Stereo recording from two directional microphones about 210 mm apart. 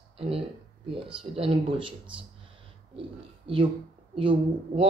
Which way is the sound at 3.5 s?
25° right (ahead or behind).